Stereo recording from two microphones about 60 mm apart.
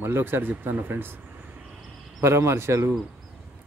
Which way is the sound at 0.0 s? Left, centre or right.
Right.